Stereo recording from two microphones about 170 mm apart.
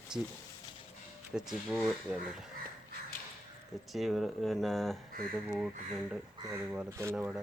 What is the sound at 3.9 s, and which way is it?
Speech, centre (ahead or behind).